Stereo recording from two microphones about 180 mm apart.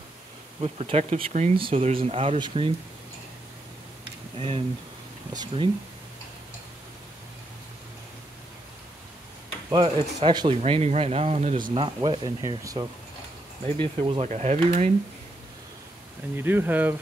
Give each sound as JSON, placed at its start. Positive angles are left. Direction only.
{"t": 0.6, "sound": "speech", "side_deg": -35}
{"t": 4.4, "sound": "speech", "side_deg": -35}
{"t": 5.3, "sound": "speech", "side_deg": -20}
{"t": 9.7, "sound": "speech", "side_deg": -25}
{"t": 10.6, "sound": "speech", "side_deg": -35}
{"t": 13.7, "sound": "speech", "side_deg": -30}
{"t": 16.3, "sound": "speech", "side_deg": -10}